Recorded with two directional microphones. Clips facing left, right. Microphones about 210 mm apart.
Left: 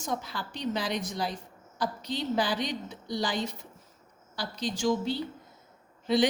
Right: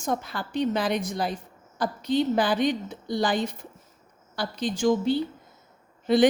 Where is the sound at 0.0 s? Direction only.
55° right (ahead or behind).